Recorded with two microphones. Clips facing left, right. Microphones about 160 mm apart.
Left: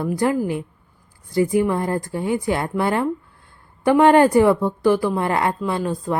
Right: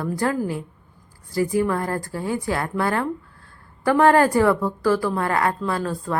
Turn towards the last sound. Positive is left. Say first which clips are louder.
# left 2 dB
turn(degrees=20)  # may be behind; listen again after turning